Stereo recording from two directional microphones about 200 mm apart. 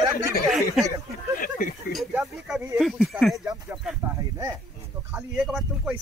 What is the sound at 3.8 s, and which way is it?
Speech, centre (ahead or behind).